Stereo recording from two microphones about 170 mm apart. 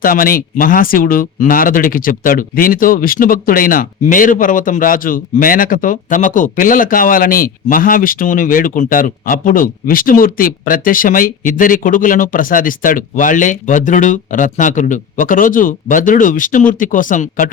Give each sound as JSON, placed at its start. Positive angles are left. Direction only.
{"t": 0.0, "sound": "speech", "side_deg": 55}